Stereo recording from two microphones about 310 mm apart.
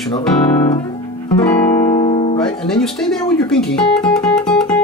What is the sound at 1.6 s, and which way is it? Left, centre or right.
Music, centre.